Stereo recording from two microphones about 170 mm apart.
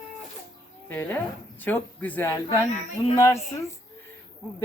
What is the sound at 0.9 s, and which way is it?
Speech, 10° left (ahead or behind).